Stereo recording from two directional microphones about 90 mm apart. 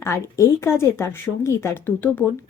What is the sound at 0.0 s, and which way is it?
A woman's voice, 30° left (ahead or behind).